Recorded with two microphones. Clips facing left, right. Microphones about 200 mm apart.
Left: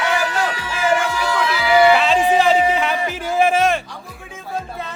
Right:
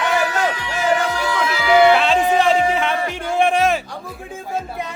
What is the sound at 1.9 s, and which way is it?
Music, centre (ahead or behind).